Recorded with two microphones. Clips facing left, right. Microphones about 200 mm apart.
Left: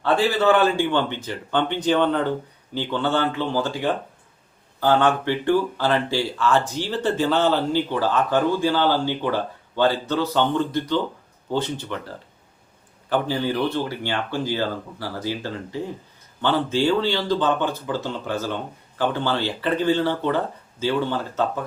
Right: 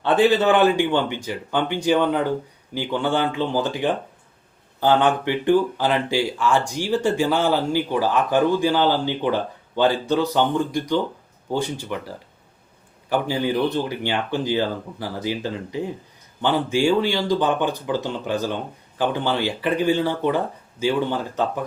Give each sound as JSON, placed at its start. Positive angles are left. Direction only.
{"t": 0.0, "sound": "speech", "side_deg": -20}